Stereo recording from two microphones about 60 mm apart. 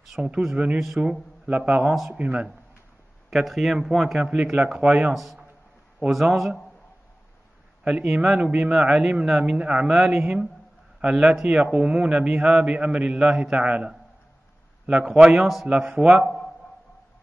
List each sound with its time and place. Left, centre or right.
0.2 s a man's voice: centre
1.7 s speech: right
3.3 s speech: centre
4.3 s a man's voice: centre
5.1 s speech: centre
7.8 s a man's voice: centre
15.7 s a man's voice: right
16.3 s a sound: centre